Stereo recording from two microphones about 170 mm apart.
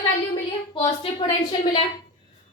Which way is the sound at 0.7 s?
30° left (ahead or behind).